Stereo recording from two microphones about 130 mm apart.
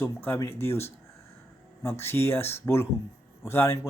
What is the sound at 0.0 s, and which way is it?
Speech, 15° left (ahead or behind).